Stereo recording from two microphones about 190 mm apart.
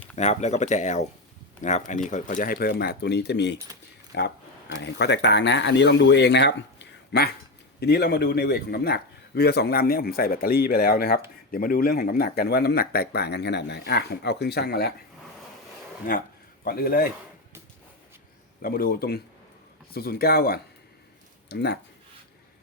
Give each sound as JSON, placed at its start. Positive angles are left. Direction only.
{"t": 0.2, "sound": "a man's voice", "side_deg": 35}
{"t": 16.6, "sound": "a man's voice", "side_deg": 50}
{"t": 18.6, "sound": "a man's voice", "side_deg": 50}